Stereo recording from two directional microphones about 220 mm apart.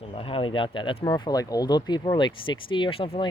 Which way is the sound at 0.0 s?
25° left (ahead or behind).